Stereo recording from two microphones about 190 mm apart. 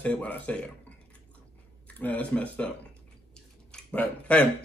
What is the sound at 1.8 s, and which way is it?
Speech, 10° left (ahead or behind).